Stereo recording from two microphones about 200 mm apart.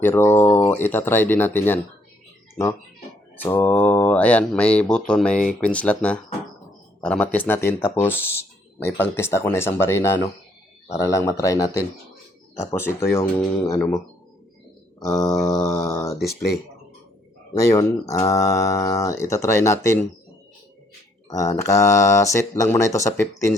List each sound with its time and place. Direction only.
0.0 s speech: 10° left (ahead or behind)
3.3 s speech: 10° left (ahead or behind)
14.9 s speech: 15° left (ahead or behind)
17.5 s speech: 15° left (ahead or behind)
21.2 s speech: 15° left (ahead or behind)